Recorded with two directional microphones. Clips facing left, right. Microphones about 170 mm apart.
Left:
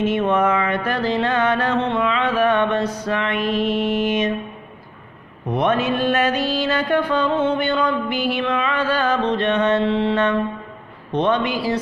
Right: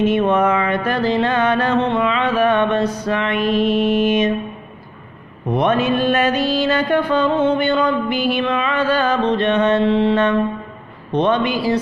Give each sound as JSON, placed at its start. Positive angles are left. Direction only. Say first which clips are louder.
{"t": 0.1, "sound": "mantra", "louder": "right 2 dB", "side_deg": -25}
{"t": 5.5, "sound": "mantra", "louder": "right 2 dB", "side_deg": -25}
{"t": 11.2, "sound": "mantra", "louder": "right 2 dB", "side_deg": -20}